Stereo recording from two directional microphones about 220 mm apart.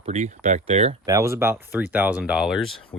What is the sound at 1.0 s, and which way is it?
Speech, 15° right (ahead or behind).